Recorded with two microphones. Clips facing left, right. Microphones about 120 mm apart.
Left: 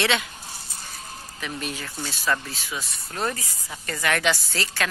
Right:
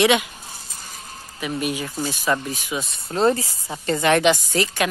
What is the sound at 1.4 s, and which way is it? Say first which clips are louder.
Speech: right 7 dB; 10° right (ahead or behind).